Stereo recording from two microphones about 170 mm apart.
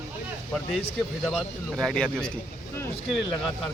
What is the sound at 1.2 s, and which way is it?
Speech, centre (ahead or behind).